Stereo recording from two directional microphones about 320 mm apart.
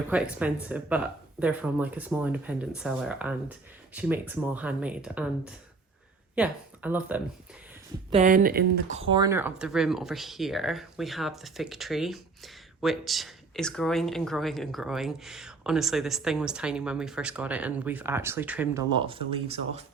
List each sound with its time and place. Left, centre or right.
0.1 s speech: centre
8.1 s speech: right